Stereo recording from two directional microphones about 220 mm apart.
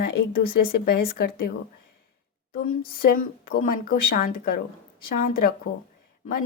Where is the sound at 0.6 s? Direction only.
40° left (ahead or behind).